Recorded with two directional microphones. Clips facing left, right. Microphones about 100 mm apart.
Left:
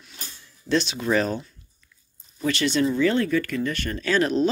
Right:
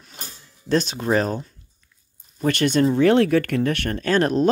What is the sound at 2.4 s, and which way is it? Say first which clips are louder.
Speech: right 4 dB; 50° right (ahead or behind).